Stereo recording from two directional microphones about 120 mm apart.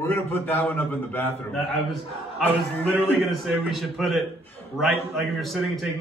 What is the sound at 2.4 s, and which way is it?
Speech, 10° left (ahead or behind).